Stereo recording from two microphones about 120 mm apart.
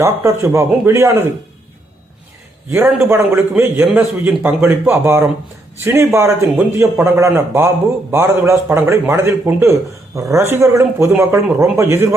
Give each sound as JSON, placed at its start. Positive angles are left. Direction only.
{"t": 0.0, "sound": "a man's voice", "side_deg": -20}
{"t": 2.6, "sound": "a man's voice", "side_deg": -20}